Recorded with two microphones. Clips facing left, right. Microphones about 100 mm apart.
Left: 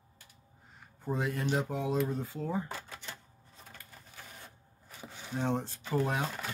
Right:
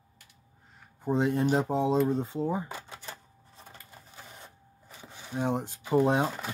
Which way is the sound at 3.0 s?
30° right (ahead or behind).